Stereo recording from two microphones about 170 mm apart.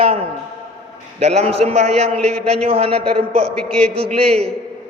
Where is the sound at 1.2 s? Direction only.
40° right (ahead or behind).